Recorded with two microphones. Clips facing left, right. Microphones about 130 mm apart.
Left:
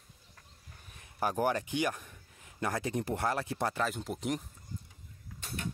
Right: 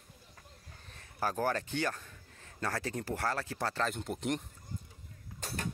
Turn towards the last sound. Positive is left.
turn(degrees=-40)  # may be behind; listen again after turning